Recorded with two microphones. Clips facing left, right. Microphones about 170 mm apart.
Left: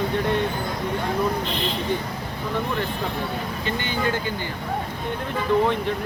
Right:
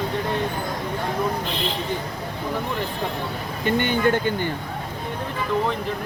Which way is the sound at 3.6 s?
55° right (ahead or behind).